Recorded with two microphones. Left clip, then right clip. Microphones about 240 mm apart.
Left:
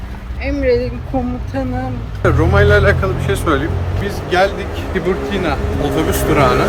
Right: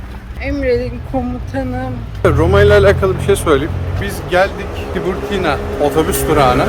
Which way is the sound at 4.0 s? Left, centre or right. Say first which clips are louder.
Right 1 dB; centre.